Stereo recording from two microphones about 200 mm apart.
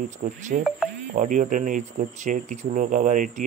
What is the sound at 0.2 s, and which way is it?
Speech, 40° right (ahead or behind).